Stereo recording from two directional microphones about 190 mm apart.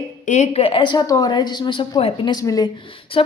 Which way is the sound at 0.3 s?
35° left (ahead or behind).